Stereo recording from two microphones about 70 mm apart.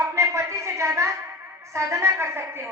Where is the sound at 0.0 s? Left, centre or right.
Right.